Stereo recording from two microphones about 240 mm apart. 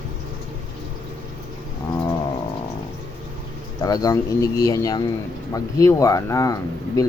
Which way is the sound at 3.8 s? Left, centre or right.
Centre.